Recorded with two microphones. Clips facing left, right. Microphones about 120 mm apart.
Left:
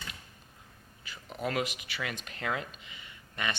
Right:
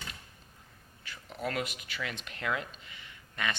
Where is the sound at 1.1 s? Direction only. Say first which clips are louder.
Left 2 dB; 10° left (ahead or behind).